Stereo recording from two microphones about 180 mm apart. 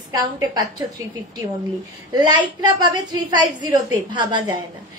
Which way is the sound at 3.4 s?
20° right (ahead or behind).